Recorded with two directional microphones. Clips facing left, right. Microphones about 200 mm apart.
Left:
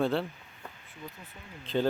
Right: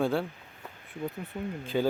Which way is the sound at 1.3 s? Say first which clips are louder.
Right 16 dB; 60° right (ahead or behind).